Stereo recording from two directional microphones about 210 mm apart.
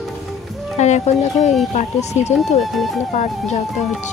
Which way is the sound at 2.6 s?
Centre (ahead or behind).